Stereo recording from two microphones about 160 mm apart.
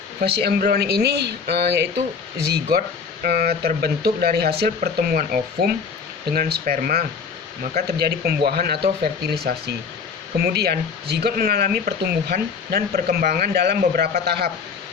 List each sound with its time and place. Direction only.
0.2 s speech: 85° right; by 7.0 s 65° right (ahead or behind)
7.8 s speech: 80° right